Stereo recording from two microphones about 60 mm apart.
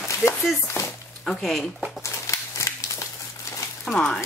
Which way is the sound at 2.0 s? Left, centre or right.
Left.